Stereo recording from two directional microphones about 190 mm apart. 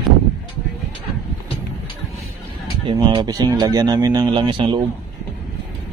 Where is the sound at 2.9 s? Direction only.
30° right (ahead or behind).